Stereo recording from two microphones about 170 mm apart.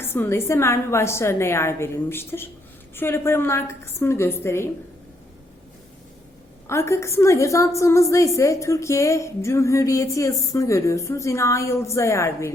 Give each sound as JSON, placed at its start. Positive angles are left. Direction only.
{"t": 0.0, "sound": "a woman's voice", "side_deg": 15}
{"t": 6.7, "sound": "a woman's voice", "side_deg": 15}